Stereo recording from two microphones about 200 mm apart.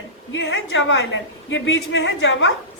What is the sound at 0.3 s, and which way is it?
A woman's voice, 65° left (ahead or behind).